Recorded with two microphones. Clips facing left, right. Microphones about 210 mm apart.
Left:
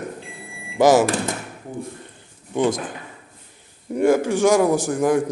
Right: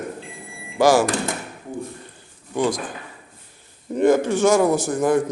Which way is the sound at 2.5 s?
20° left (ahead or behind).